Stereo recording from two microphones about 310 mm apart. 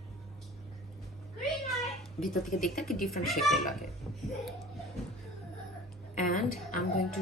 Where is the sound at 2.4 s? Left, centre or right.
Left.